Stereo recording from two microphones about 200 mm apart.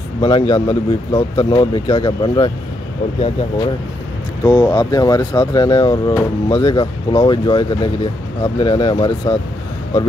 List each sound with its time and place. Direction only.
0.2 s speech: 20° left (ahead or behind)
4.4 s speech: 15° left (ahead or behind)